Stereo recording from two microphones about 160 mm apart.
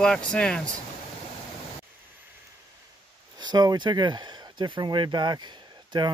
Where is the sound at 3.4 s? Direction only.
25° right (ahead or behind).